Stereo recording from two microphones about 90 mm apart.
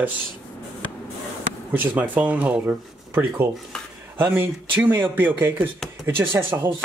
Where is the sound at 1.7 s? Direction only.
20° right (ahead or behind).